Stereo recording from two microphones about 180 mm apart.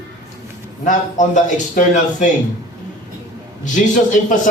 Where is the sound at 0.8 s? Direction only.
45° left (ahead or behind).